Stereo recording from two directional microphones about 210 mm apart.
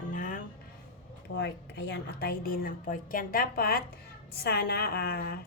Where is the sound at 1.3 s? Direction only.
55° left (ahead or behind).